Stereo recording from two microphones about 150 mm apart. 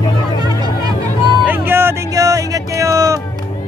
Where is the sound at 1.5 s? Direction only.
15° right (ahead or behind).